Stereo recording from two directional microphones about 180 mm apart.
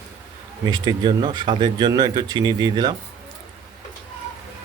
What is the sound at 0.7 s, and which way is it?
Speech, 25° right (ahead or behind).